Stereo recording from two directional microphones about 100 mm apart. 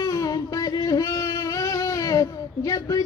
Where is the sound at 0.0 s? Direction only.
35° left (ahead or behind).